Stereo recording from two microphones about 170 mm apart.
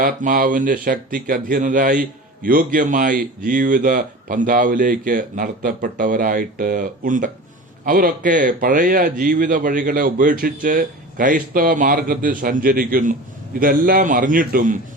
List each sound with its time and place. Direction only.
0.0 s speech: 55° right (ahead or behind)